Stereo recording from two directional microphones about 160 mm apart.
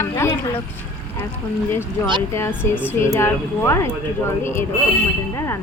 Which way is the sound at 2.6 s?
10° right (ahead or behind).